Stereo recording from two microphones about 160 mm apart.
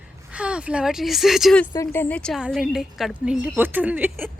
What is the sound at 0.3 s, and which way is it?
Speech, 5° right (ahead or behind).